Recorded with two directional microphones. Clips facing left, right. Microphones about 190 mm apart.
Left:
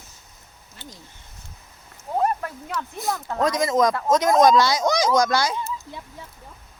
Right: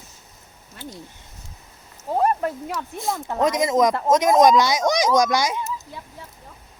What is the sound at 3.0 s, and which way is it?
Speech, 25° right (ahead or behind).